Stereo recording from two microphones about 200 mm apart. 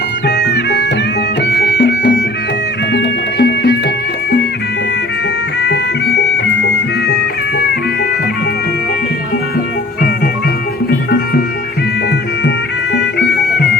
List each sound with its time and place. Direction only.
0.3 s music: 60° left (ahead or behind)
5.6 s music: 55° left (ahead or behind)
12.5 s music: 55° left (ahead or behind)